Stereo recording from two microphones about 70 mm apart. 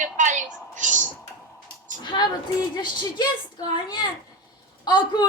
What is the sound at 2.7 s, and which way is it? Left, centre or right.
A woman's voice, left.